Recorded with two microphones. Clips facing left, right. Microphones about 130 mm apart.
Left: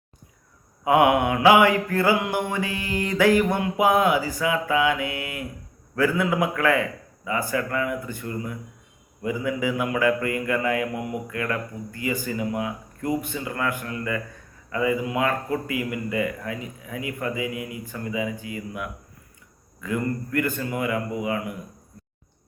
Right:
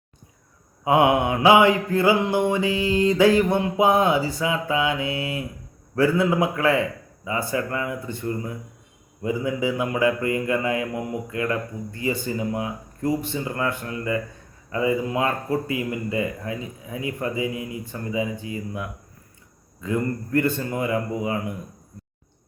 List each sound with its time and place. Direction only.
0.9 s mantra: 25° right (ahead or behind)